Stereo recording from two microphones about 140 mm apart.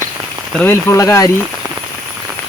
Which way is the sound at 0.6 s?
20° left (ahead or behind).